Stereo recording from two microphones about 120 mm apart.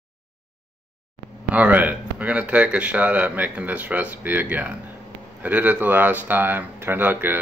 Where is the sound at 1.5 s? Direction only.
10° right (ahead or behind).